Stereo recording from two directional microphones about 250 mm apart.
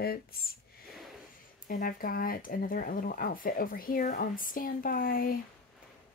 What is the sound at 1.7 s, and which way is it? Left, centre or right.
Speech, left.